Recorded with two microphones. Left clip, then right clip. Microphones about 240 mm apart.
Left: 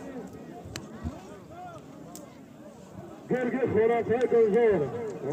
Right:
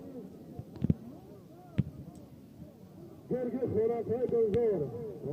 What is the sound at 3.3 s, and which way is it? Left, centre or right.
A man's voice, left.